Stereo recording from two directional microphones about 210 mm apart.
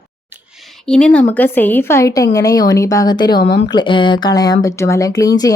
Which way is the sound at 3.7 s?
20° left (ahead or behind).